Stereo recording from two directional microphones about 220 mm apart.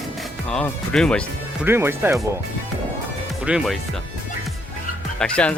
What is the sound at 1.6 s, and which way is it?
Speech, 10° right (ahead or behind).